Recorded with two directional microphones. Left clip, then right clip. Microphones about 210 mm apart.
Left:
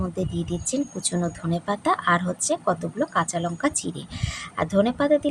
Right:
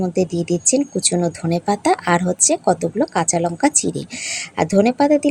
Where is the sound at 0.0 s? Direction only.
25° right (ahead or behind).